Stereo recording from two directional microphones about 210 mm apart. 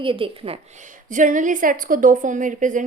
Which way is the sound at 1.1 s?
40° right (ahead or behind).